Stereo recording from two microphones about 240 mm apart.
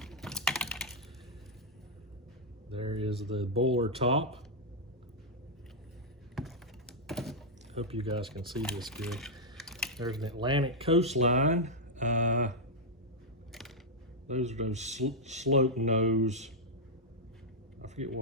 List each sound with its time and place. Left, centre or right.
0.0 s typing: centre
2.6 s speech: right
6.3 s a sound: centre
7.7 s speech: right
8.5 s typing: centre
10.0 s speech: centre; by 12.5 s right
13.5 s a sound: centre
14.3 s speech: right
17.8 s a sound: right